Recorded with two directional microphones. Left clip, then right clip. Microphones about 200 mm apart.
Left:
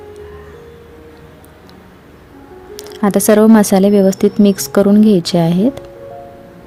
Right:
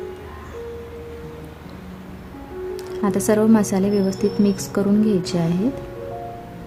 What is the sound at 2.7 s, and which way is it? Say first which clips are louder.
Speech: left 8 dB; 40° left (ahead or behind).